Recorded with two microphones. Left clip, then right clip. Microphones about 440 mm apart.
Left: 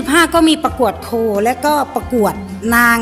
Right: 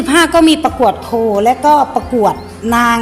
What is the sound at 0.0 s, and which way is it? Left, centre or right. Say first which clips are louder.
A woman's voice: right 2 dB; left.